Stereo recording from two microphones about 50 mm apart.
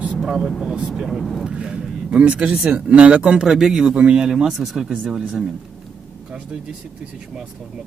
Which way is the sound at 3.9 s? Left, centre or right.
Centre.